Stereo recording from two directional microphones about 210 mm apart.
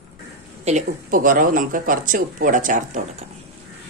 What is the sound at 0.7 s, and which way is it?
Speech, 35° right (ahead or behind).